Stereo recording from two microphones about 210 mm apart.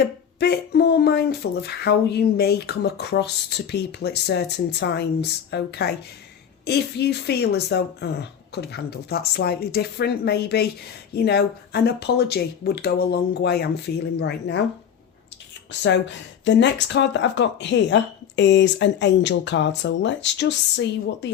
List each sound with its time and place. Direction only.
0.3 s speech: 50° left (ahead or behind)
15.8 s speech: 60° left (ahead or behind)